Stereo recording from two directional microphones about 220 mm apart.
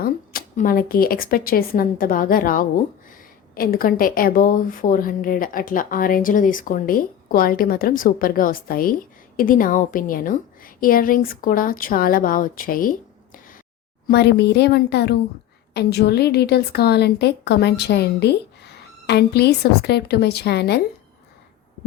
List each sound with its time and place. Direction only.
0.0 s a woman's voice: 40° left (ahead or behind)